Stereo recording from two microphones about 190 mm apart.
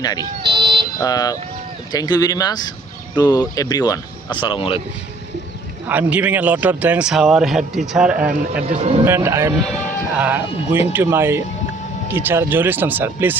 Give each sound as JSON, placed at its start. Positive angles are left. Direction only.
{"t": 0.0, "sound": "speech", "side_deg": 20}
{"t": 0.4, "sound": "car alarm", "side_deg": -25}
{"t": 0.9, "sound": "speech", "side_deg": 20}
{"t": 5.9, "sound": "a man's voice", "side_deg": -10}
{"t": 8.6, "sound": "speech", "side_deg": -35}
{"t": 9.0, "sound": "a man's voice", "side_deg": -15}
{"t": 9.6, "sound": "speech", "side_deg": 5}
{"t": 10.2, "sound": "a man's voice", "side_deg": -10}